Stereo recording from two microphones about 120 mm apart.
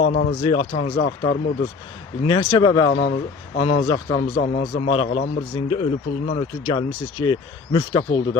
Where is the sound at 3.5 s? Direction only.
50° left (ahead or behind).